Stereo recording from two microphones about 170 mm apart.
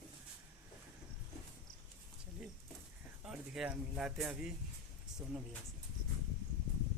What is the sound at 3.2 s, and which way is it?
Speech, 5° right (ahead or behind).